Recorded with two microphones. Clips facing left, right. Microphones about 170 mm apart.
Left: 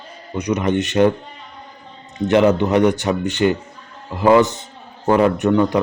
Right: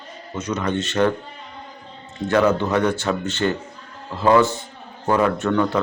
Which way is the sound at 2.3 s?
20° left (ahead or behind).